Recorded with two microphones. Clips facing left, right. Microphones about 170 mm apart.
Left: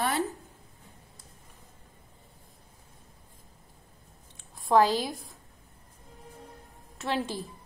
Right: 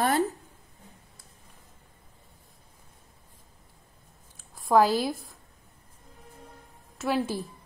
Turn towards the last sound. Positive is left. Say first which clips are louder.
# right 3 dB
turn(degrees=-10)  # may be behind; listen again after turning